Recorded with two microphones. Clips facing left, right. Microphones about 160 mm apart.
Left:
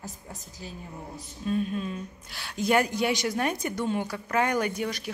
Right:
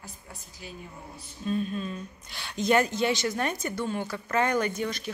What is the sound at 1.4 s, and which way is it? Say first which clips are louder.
Speech: left 1 dB; 5° left (ahead or behind).